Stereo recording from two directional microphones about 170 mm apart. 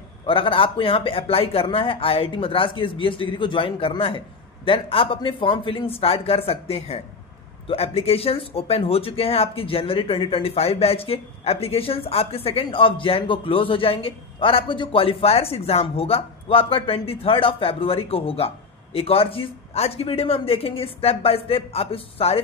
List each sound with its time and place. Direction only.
0.3 s speech: 30° left (ahead or behind)